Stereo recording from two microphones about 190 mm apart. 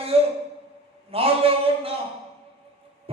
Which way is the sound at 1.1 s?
30° right (ahead or behind).